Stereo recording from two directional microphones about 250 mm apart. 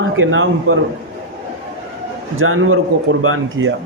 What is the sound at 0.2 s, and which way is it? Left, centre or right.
Speech, right.